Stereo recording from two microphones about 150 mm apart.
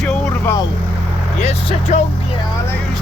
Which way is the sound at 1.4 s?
50° left (ahead or behind).